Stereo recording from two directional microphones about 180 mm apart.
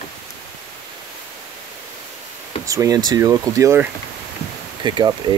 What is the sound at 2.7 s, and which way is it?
Speech, 20° right (ahead or behind).